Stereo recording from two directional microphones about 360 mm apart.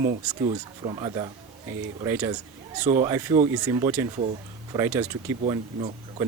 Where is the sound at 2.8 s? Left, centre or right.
Centre.